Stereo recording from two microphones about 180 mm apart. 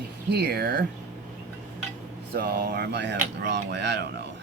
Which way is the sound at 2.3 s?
65° right (ahead or behind).